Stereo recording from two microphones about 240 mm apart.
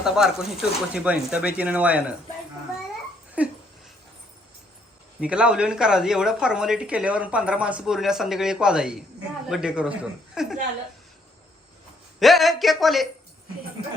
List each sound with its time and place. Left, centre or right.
0.0 s speech: centre
3.4 s a sound: centre
5.2 s speech: centre
12.2 s speech: centre